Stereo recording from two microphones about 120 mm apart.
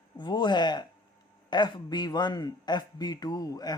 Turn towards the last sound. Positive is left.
turn(degrees=30)  # may be behind; listen again after turning